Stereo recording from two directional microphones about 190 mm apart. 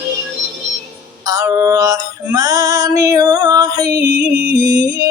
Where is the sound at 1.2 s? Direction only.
20° right (ahead or behind).